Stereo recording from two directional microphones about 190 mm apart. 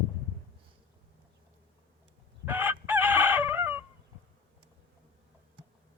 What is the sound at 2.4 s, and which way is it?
Chicken, 10° right (ahead or behind).